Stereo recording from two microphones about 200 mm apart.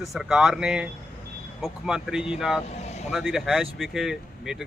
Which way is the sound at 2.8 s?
35° left (ahead or behind).